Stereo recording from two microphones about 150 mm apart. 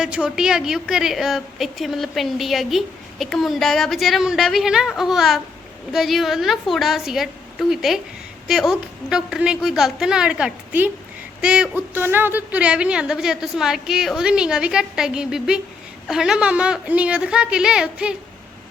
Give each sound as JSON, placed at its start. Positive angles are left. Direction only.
{"t": 0.0, "sound": "a woman's voice", "side_deg": -5}